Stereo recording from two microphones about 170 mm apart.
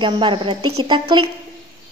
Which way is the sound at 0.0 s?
30° right (ahead or behind).